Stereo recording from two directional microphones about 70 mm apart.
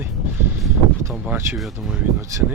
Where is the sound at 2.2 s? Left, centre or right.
Right.